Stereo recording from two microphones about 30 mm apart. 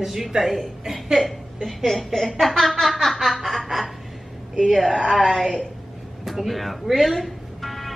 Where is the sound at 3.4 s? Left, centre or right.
Centre.